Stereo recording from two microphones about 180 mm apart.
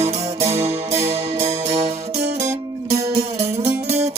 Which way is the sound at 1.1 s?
35° right (ahead or behind).